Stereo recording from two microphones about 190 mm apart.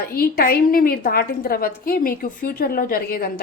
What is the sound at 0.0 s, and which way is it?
A woman's voice, 55° left (ahead or behind).